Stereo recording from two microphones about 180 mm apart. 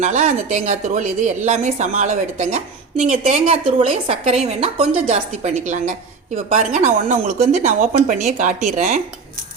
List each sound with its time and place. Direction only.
0.0 s a woman's voice: 40° right (ahead or behind)